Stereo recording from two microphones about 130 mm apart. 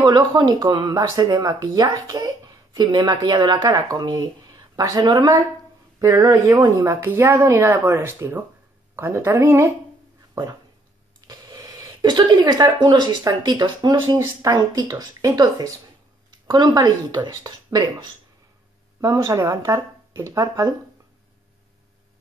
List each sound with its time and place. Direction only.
0.0 s speech: 35° right (ahead or behind)
11.1 s a sound: 30° right (ahead or behind)
12.7 s speech: 35° right (ahead or behind)